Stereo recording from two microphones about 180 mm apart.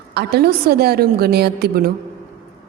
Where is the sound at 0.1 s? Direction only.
65° right (ahead or behind).